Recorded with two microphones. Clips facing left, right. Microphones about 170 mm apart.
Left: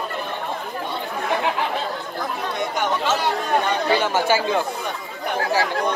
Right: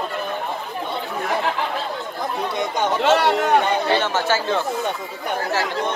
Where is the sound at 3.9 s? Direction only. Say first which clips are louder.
Left 1 dB; 10° left (ahead or behind).